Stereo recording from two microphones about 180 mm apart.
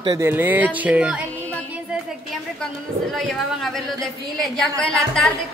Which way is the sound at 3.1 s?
Centre (ahead or behind).